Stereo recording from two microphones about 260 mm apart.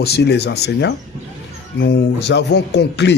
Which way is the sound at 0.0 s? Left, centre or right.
Left.